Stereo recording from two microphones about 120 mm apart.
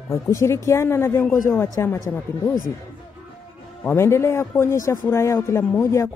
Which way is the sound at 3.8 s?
20° left (ahead or behind).